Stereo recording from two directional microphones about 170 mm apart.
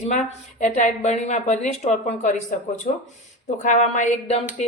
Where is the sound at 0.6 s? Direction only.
45° left (ahead or behind).